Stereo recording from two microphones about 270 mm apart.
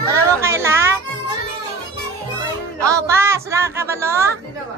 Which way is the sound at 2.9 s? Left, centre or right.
Centre.